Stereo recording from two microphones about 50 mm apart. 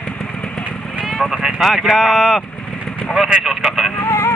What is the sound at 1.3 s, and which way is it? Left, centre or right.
Speech, centre.